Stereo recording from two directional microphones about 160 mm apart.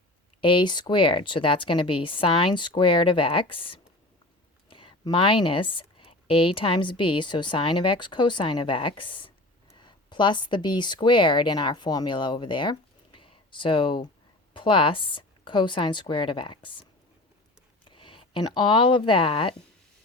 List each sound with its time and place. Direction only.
0.4 s speech: 30° left (ahead or behind)